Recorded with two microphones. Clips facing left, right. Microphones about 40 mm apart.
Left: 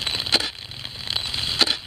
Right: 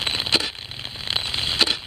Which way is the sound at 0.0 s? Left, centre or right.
Centre.